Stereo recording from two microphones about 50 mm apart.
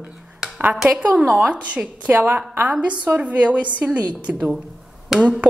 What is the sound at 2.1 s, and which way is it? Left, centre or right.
Speech, right.